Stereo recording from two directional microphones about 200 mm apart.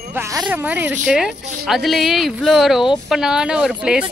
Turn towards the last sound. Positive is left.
turn(degrees=-5)  # may be behind; listen again after turning